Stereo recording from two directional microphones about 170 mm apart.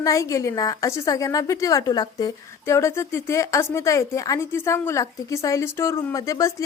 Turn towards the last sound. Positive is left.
turn(degrees=20)  # may be behind; listen again after turning